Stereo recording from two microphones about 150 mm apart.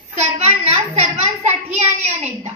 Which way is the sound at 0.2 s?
45° right (ahead or behind).